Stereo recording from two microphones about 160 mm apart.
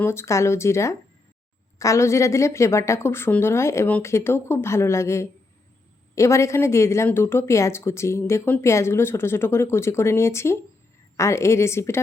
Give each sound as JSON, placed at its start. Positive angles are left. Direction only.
{"t": 0.0, "sound": "a woman's voice", "side_deg": 15}